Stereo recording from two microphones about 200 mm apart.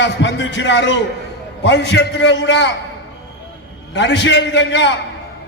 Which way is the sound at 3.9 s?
60° left (ahead or behind).